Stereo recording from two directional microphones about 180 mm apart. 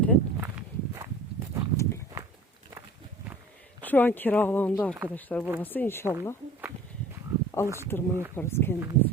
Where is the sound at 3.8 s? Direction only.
10° left (ahead or behind).